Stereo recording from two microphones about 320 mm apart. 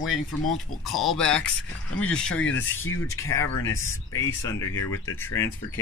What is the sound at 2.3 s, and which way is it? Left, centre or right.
Speech, left.